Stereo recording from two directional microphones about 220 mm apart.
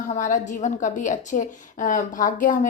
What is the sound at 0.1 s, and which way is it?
A woman's voice, 35° left (ahead or behind).